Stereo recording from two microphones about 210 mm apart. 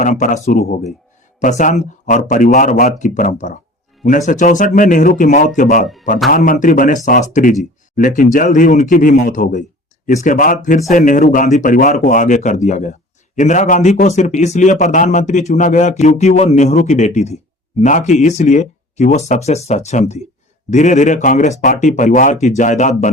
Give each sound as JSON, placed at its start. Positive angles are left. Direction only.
{"t": 0.0, "sound": "speech", "side_deg": 35}